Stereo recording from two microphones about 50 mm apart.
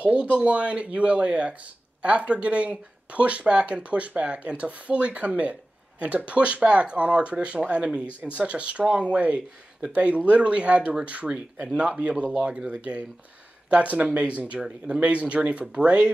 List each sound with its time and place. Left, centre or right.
0.0 s speech: right